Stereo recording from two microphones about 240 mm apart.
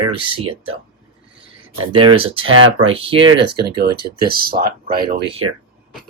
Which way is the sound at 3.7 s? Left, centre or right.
Right.